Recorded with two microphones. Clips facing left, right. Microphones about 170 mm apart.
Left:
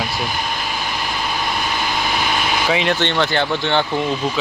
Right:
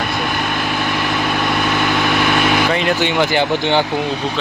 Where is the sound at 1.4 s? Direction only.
60° right (ahead or behind).